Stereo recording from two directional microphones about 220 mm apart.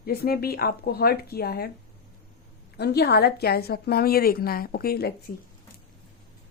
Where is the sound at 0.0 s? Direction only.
45° left (ahead or behind).